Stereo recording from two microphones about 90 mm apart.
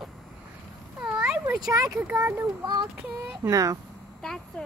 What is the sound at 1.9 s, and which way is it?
Speech, 15° right (ahead or behind).